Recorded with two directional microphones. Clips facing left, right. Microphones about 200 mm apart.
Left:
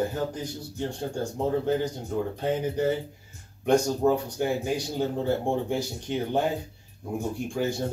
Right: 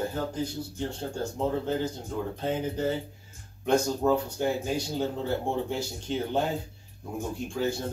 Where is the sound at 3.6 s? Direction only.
15° left (ahead or behind).